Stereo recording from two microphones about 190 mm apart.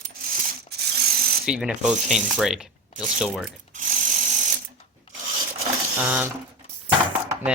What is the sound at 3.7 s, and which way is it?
Ratchet, 45° right (ahead or behind).